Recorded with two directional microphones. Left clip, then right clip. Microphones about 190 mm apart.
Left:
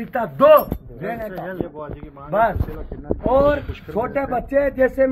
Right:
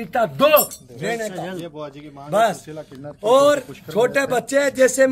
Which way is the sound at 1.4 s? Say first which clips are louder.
Left 2 dB; 85° right.